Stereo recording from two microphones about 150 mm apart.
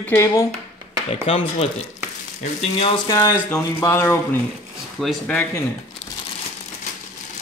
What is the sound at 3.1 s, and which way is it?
Speech, 20° left (ahead or behind).